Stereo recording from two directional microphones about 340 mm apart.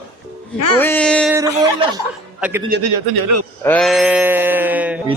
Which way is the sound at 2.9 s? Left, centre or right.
Right.